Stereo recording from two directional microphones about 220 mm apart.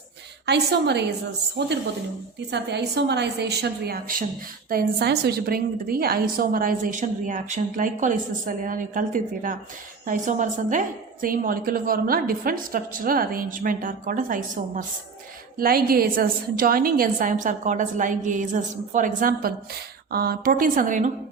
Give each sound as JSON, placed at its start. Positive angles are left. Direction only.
{"t": 0.4, "sound": "a woman's voice", "side_deg": -50}
{"t": 2.5, "sound": "a woman's voice", "side_deg": -50}